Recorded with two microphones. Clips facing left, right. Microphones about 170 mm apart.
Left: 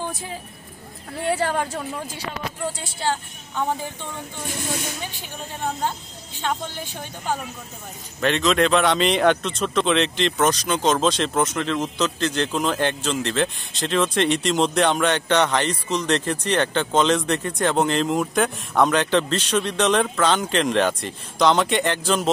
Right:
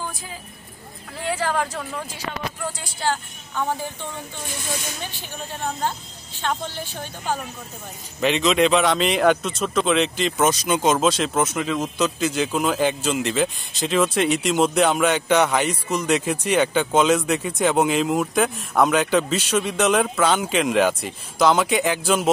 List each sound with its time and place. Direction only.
2.8 s a woman's voice: 25° left (ahead or behind)
6.4 s speech: 15° left (ahead or behind)
8.2 s speech: 5° right (ahead or behind)